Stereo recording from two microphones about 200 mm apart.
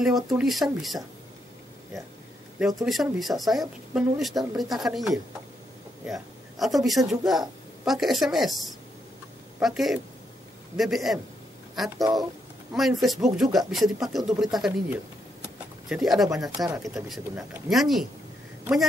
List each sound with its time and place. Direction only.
0.0 s speech: centre (ahead or behind)
2.8 s speech: centre (ahead or behind)
12.0 s speech: 20° right (ahead or behind)
12.7 s speech: centre (ahead or behind)
15.4 s a sound: centre (ahead or behind)
16.3 s speech: centre (ahead or behind)